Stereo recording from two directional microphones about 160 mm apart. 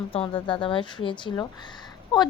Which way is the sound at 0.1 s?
35° left (ahead or behind).